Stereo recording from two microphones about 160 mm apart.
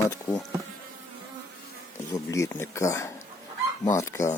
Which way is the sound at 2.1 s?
20° left (ahead or behind).